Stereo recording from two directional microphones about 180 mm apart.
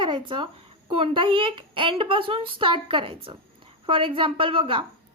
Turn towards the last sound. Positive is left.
turn(degrees=-30)  # may be behind; listen again after turning